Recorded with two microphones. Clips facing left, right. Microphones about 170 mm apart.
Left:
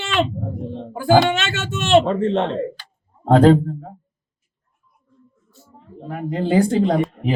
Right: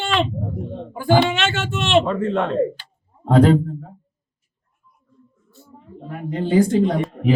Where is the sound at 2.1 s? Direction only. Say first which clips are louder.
Left 2 dB; 25° left (ahead or behind).